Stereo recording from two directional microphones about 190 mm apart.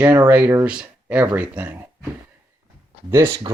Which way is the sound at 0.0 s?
10° right (ahead or behind).